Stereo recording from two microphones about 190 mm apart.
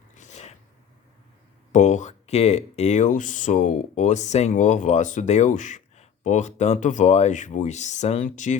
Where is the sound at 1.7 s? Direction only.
40° left (ahead or behind).